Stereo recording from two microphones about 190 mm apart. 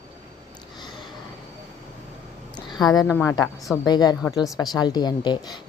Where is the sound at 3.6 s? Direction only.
Centre (ahead or behind).